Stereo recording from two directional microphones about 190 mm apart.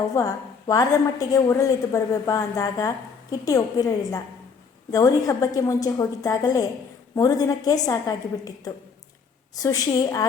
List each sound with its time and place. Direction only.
0.1 s a woman's voice: 15° left (ahead or behind)